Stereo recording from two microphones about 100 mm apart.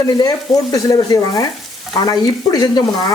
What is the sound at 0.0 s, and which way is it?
Speech, 35° left (ahead or behind).